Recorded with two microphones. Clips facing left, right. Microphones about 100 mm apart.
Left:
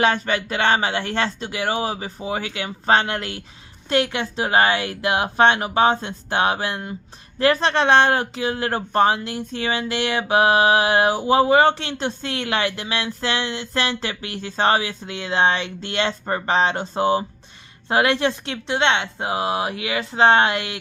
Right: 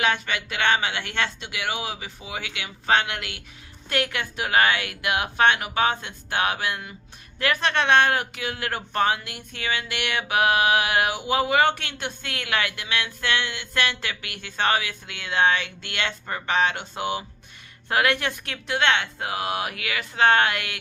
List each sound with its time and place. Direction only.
0.0 s speech: 35° left (ahead or behind)
17.8 s a woman's voice: 25° left (ahead or behind)